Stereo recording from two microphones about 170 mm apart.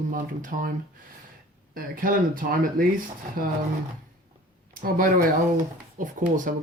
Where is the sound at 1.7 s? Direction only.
55° right (ahead or behind).